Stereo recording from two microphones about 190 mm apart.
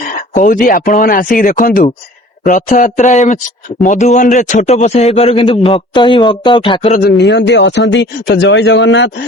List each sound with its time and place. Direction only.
0.3 s a man's voice: 45° left (ahead or behind); by 6.9 s 25° left (ahead or behind)
6.9 s speech: 60° left (ahead or behind)